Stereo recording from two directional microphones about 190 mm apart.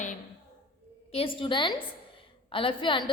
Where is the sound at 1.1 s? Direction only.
30° left (ahead or behind).